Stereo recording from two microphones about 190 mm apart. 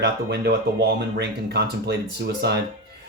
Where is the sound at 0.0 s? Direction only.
65° right (ahead or behind).